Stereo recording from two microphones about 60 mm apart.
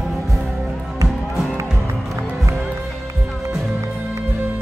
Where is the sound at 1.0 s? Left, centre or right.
Centre.